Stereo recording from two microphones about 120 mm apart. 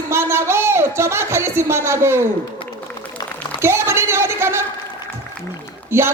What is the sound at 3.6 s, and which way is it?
Speech, 20° right (ahead or behind).